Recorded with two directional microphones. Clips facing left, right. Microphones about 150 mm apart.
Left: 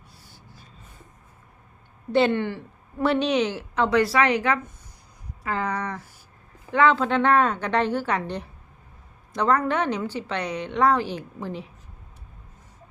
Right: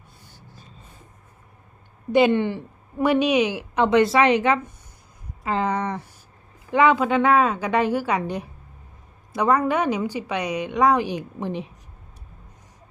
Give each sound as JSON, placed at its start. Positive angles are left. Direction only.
{"t": 2.1, "sound": "a woman's voice", "side_deg": -15}